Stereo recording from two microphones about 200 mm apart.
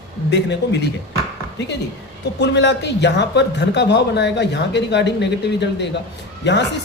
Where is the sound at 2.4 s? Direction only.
60° left (ahead or behind).